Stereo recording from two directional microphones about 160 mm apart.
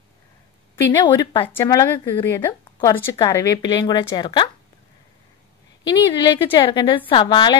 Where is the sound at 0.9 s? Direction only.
25° left (ahead or behind).